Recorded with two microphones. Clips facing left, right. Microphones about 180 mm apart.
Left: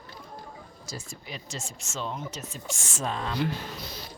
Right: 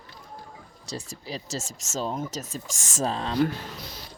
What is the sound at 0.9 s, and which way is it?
Speech, 35° right (ahead or behind).